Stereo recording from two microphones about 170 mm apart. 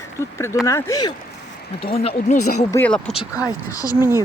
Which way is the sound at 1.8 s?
35° left (ahead or behind).